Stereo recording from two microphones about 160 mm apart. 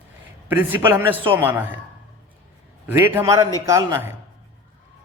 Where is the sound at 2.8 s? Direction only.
15° right (ahead or behind).